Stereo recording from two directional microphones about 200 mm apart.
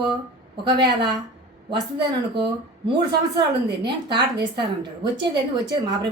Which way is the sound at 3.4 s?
20° right (ahead or behind).